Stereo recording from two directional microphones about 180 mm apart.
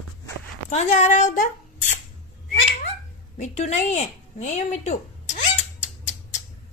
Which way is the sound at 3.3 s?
40° left (ahead or behind).